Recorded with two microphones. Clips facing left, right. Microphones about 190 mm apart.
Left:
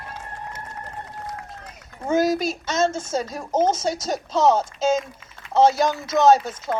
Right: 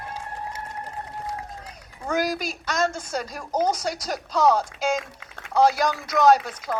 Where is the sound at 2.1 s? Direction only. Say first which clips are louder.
Left 5 dB; 25° left (ahead or behind).